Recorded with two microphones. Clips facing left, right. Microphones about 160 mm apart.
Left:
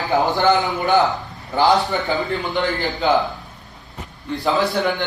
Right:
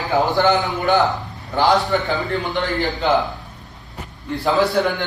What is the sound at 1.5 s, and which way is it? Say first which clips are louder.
A man's voice: even; centre (ahead or behind).